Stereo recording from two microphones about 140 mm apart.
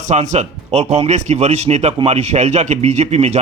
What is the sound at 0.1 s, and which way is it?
Speech, 55° right (ahead or behind).